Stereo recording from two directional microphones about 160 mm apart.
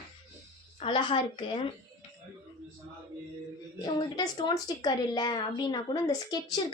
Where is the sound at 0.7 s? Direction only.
35° left (ahead or behind).